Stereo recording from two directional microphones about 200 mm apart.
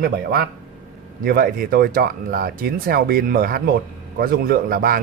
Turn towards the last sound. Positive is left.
turn(degrees=-45)  # may be behind; listen again after turning